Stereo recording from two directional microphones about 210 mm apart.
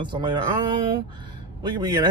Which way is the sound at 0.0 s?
20° right (ahead or behind).